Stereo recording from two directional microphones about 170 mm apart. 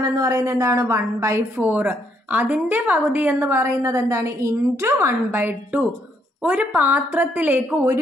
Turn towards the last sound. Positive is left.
turn(degrees=-10)  # may be behind; listen again after turning